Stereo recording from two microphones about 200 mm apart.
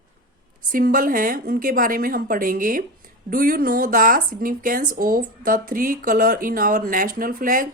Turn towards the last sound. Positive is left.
turn(degrees=-45)  # may be behind; listen again after turning